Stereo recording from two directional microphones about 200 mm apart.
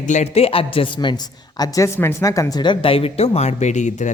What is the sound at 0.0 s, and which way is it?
A woman's voice, 35° left (ahead or behind).